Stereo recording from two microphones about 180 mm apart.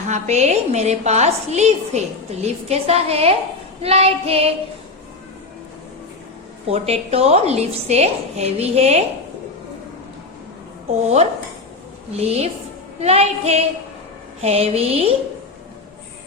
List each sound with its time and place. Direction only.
0.1 s a woman's voice: 40° right (ahead or behind)
6.7 s a woman's voice: 35° right (ahead or behind)
12.1 s a woman's voice: 35° right (ahead or behind)